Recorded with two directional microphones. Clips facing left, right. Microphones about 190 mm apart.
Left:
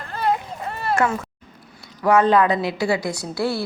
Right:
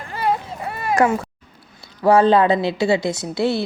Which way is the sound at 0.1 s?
10° right (ahead or behind).